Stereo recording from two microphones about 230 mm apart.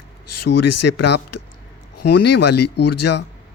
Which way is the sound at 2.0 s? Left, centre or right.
Left.